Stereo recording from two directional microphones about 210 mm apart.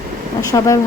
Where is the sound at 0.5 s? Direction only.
15° left (ahead or behind).